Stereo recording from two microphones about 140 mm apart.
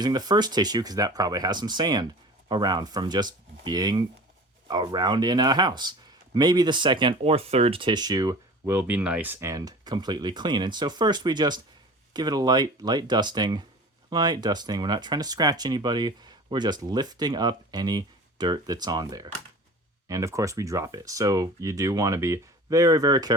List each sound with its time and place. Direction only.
0.0 s speech: 30° right (ahead or behind)